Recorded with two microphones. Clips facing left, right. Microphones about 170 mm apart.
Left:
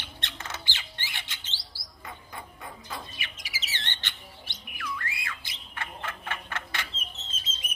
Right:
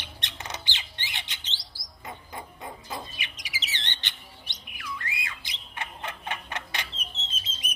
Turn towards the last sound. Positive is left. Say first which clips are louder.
# right 2 dB
turn(degrees=-20)  # may be behind; listen again after turning